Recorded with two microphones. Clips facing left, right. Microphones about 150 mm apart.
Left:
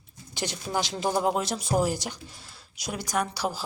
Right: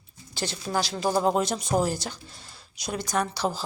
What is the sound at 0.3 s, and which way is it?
Speech, 15° left (ahead or behind).